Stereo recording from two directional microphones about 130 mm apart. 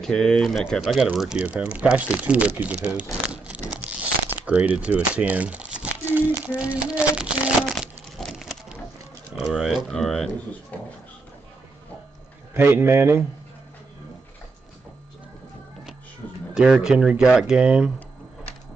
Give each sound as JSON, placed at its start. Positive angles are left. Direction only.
{"t": 0.0, "sound": "speech", "side_deg": 5}
{"t": 2.1, "sound": "crumpling", "side_deg": -10}
{"t": 4.5, "sound": "speech", "side_deg": -10}
{"t": 8.2, "sound": "a sound", "side_deg": 0}
{"t": 9.3, "sound": "speech", "side_deg": 0}
{"t": 12.5, "sound": "speech", "side_deg": -15}
{"t": 16.5, "sound": "speech", "side_deg": -5}